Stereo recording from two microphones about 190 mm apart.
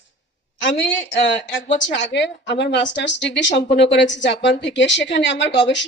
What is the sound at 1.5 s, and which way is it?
Speech, 70° left (ahead or behind).